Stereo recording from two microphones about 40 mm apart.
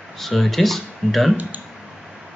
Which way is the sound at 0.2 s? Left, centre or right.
Centre.